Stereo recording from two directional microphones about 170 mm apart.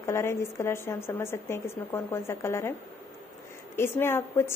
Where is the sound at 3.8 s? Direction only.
15° left (ahead or behind).